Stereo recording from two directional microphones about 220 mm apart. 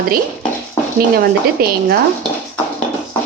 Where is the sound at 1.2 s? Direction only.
45° right (ahead or behind).